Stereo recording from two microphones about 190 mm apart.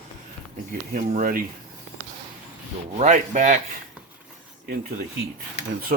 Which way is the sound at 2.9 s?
40° right (ahead or behind).